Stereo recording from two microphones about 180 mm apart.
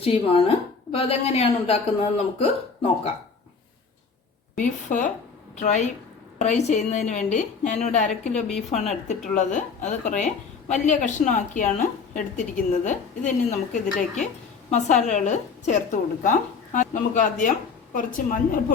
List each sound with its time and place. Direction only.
0.0 s a woman's voice: 35° left (ahead or behind)
4.5 s a woman's voice: 45° left (ahead or behind)